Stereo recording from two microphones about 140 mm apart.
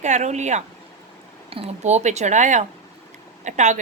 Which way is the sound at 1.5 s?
45° right (ahead or behind).